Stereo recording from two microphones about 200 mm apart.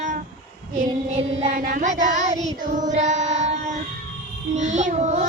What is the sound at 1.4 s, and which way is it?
Child singing, 40° right (ahead or behind).